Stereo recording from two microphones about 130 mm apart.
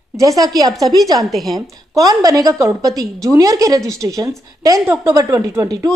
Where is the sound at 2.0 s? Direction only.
25° right (ahead or behind).